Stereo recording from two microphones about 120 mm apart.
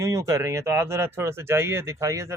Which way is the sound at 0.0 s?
25° right (ahead or behind).